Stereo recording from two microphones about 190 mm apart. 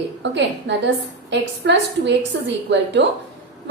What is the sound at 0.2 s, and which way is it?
A woman's voice, 70° right (ahead or behind).